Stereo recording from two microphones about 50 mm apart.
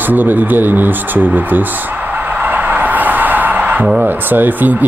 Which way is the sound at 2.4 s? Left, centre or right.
Right.